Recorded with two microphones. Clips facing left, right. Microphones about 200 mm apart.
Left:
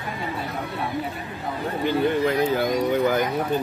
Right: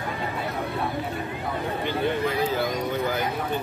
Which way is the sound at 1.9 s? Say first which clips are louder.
Left 5 dB; 55° left (ahead or behind).